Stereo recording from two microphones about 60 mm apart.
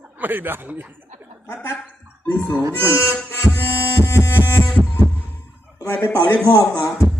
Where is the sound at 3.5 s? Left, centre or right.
Right.